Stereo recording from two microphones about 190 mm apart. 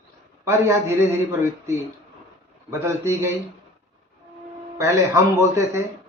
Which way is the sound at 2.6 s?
15° right (ahead or behind).